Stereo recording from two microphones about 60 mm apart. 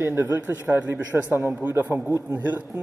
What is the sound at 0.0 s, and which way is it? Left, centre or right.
Speech, right.